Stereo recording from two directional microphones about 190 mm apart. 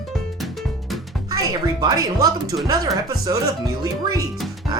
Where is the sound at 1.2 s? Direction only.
20° right (ahead or behind).